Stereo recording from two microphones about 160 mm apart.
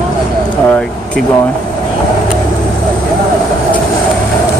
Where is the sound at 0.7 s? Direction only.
5° left (ahead or behind).